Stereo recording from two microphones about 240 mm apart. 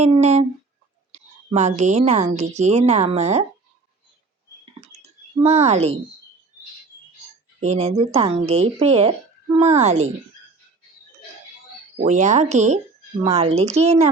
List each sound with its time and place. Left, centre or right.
0.0 s a woman's voice: right
5.4 s a woman's voice: right
7.6 s a woman's voice: right
11.9 s a woman's voice: right